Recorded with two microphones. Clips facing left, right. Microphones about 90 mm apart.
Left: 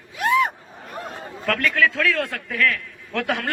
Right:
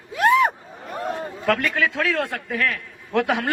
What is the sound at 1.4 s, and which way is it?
A man's voice, 15° right (ahead or behind).